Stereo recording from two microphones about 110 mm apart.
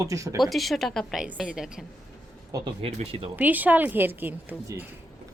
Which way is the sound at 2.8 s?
60° right (ahead or behind).